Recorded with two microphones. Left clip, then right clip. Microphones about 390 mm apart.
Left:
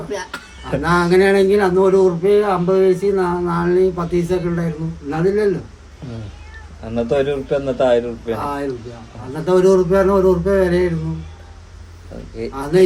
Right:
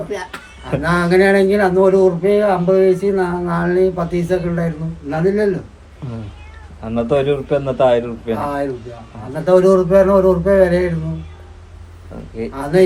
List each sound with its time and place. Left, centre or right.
0.6 s speech: centre
6.8 s a man's voice: centre
8.4 s speech: centre
12.7 s speech: centre